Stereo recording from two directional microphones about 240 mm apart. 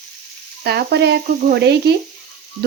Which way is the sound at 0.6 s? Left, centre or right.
Right.